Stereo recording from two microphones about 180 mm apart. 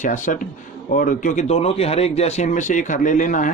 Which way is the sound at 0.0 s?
45° left (ahead or behind).